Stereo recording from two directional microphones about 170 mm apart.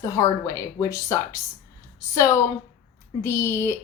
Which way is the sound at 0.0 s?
20° left (ahead or behind).